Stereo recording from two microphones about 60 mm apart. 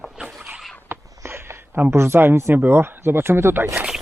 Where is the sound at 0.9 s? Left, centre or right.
Right.